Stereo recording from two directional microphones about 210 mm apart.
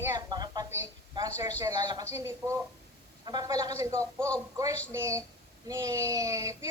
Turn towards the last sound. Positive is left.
turn(degrees=-15)  # may be behind; listen again after turning